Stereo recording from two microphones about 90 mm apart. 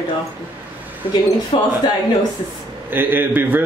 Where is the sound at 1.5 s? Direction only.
90° left.